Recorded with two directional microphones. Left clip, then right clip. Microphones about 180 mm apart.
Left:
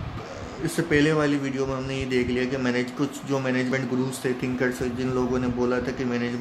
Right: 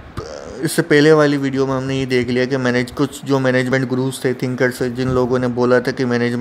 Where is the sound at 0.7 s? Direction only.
50° right (ahead or behind).